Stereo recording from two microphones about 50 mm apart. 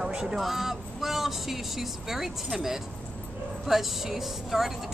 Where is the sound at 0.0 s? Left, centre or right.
Centre.